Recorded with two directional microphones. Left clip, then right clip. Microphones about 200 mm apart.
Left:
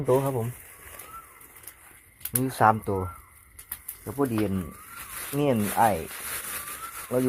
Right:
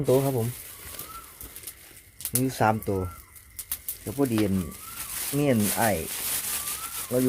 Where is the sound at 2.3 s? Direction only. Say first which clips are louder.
Left 3 dB; centre (ahead or behind).